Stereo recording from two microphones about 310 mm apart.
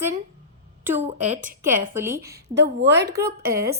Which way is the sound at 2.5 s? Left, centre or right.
Right.